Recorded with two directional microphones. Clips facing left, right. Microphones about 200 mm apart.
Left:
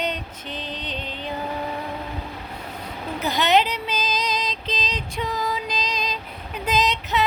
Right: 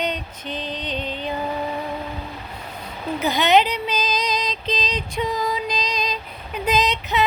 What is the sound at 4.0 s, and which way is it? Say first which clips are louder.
Female singing: even; 5° left (ahead or behind).